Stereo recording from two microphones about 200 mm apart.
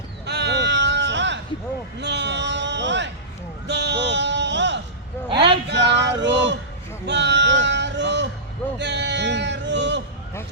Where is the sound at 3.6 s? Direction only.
60° right (ahead or behind).